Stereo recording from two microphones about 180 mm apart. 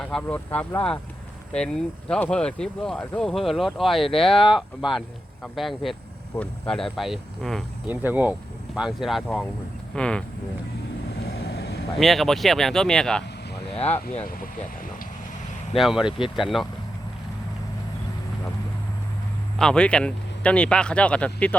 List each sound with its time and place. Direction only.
0.0 s speech: 5° left (ahead or behind)
4.0 s speech: 30° left (ahead or behind)
4.9 s speech: centre (ahead or behind)
11.2 s vehicle: 65° left (ahead or behind)
11.9 s speech: centre (ahead or behind)
15.7 s speech: centre (ahead or behind)
19.5 s speech: 5° left (ahead or behind)